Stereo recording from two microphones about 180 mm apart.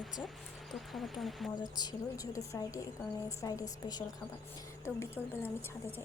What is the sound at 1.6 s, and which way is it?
A woman's voice, 20° left (ahead or behind).